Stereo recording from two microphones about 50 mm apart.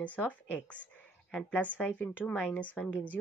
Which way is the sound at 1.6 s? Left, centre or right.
Left.